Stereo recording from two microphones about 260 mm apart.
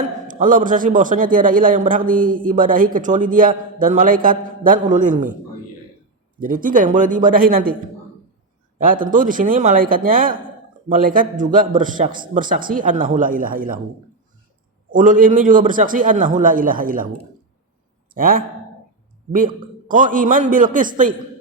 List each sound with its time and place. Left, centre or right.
0.0 s a man's voice: right
6.4 s a man's voice: right
8.8 s a man's voice: right
14.8 s a man's voice: right
18.1 s speech: right
19.9 s a man's voice: right